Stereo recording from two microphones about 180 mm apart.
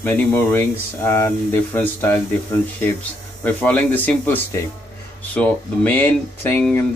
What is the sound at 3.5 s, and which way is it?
Speech, 10° left (ahead or behind).